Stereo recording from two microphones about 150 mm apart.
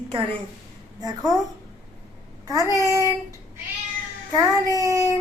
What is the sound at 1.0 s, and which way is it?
Child singing, 25° right (ahead or behind).